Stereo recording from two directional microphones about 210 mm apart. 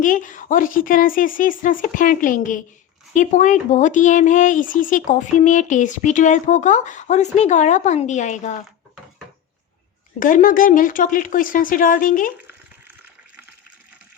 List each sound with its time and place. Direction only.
0.0 s speech: 40° left (ahead or behind)
10.2 s speech: 40° left (ahead or behind)